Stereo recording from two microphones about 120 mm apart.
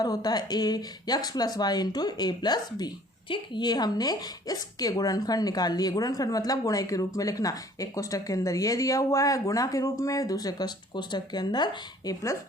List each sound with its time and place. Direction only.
0.0 s speech: 35° left (ahead or behind)